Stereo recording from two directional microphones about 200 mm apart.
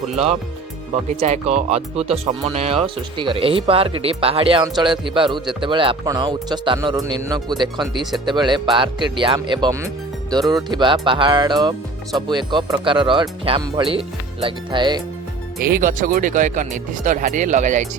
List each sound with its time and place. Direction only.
1.2 s speech: 35° right (ahead or behind)
15.6 s speech: 40° right (ahead or behind)